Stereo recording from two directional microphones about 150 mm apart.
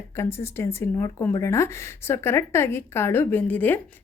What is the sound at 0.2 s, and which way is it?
A woman's voice, 15° left (ahead or behind).